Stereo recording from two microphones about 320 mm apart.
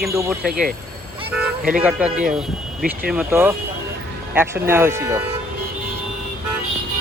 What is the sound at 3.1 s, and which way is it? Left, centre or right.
Speech, centre.